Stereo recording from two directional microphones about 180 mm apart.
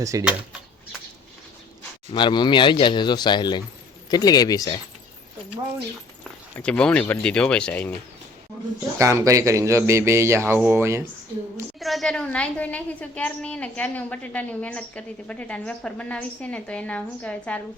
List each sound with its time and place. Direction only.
0.0 s speech: 15° right (ahead or behind)
2.1 s speech: 25° left (ahead or behind)
6.6 s a woman's voice: 5° left (ahead or behind)
9.0 s speech: 15° right (ahead or behind)
11.8 s a woman's voice: centre (ahead or behind)